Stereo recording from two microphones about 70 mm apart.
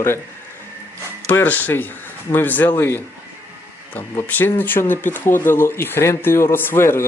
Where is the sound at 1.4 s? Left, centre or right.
Left.